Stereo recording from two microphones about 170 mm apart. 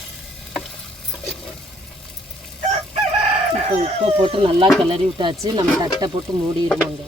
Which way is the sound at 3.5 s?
35° right (ahead or behind).